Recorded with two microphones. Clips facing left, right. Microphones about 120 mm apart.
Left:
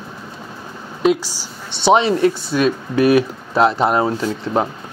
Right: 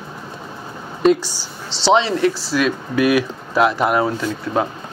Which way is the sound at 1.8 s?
20° left (ahead or behind).